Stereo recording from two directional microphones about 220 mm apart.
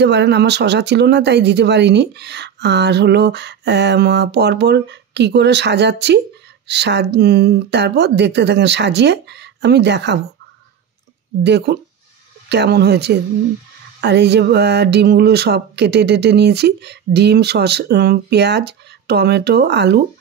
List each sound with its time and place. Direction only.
0.0 s speech: 50° right (ahead or behind)
11.4 s speech: 50° right (ahead or behind)